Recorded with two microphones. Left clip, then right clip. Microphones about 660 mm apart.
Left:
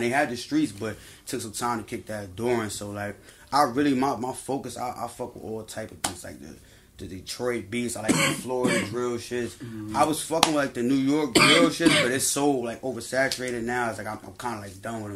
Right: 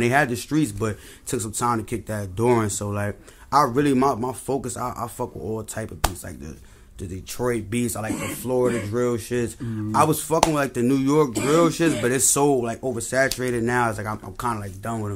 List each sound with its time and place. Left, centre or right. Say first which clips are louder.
0.0 s speech: right 4 dB; right
7.3 s speech: right 4 dB; right